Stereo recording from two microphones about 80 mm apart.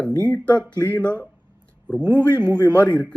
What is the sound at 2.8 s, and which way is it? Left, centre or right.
Speech, centre.